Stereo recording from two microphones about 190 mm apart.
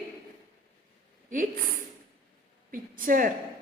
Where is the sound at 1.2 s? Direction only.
45° right (ahead or behind).